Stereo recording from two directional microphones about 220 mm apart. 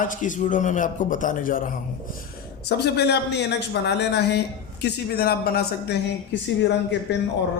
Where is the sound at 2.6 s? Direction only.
50° left (ahead or behind).